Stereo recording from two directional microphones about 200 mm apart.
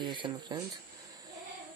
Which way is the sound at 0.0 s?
20° right (ahead or behind).